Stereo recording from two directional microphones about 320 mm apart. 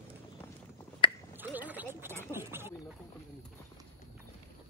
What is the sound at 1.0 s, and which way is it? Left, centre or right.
Finger snapping, centre.